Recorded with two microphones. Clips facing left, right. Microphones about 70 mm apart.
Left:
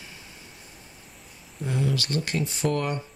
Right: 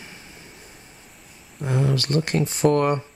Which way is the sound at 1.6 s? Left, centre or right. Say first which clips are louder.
Right 4 dB; right.